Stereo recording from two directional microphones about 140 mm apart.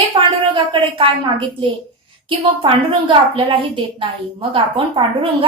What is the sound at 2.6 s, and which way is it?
A woman's voice, 40° right (ahead or behind).